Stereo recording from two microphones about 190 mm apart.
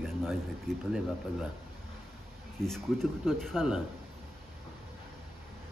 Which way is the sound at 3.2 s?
Centre (ahead or behind).